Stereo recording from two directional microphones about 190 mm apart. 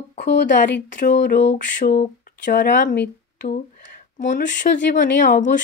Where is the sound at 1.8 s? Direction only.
45° left (ahead or behind).